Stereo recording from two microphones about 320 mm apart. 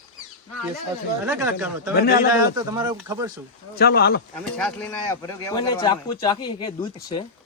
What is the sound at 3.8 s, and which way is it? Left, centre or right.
Speech, left.